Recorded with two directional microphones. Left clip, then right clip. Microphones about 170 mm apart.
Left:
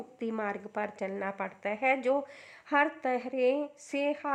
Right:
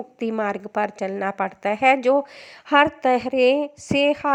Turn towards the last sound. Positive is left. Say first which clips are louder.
# right 12 dB
turn(degrees=-35)  # may be behind; listen again after turning